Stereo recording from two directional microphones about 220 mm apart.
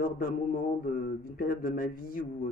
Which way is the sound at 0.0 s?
40° left (ahead or behind).